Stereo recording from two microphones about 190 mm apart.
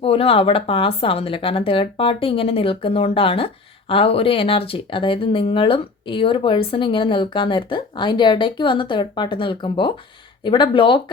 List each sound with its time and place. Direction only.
0.0 s speech: 30° left (ahead or behind)